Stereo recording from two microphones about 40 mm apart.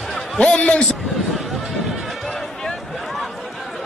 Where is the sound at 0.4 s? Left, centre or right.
Left.